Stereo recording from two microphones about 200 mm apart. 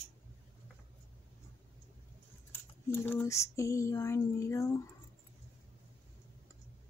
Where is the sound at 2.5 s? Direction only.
10° left (ahead or behind).